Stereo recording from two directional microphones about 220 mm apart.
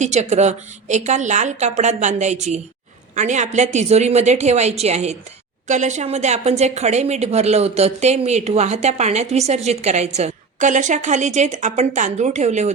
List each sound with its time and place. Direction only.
0.0 s a woman's voice: 30° right (ahead or behind)